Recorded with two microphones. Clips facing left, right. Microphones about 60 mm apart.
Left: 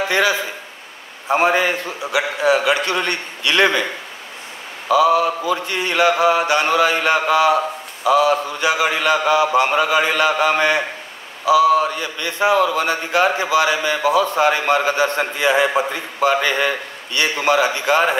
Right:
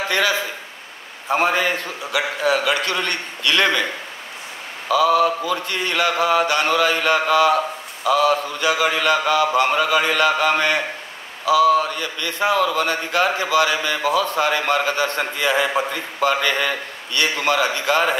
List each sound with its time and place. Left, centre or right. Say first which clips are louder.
1.3 s speech: left 3 dB; left
4.8 s speech: left 2 dB; left